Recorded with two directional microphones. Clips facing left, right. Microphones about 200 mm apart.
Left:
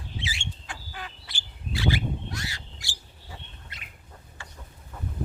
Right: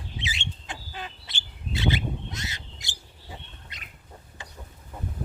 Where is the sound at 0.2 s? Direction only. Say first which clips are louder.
Even; 20° right (ahead or behind).